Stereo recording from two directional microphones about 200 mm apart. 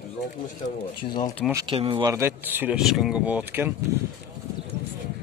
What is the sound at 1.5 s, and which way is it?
Speech, 20° right (ahead or behind).